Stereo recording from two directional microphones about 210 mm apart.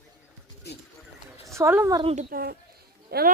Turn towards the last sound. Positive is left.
turn(degrees=-50)  # may be behind; listen again after turning